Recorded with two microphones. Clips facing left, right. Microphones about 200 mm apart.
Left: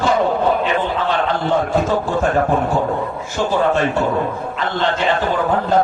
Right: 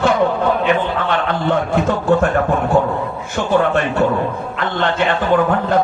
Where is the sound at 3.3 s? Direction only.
60° right (ahead or behind).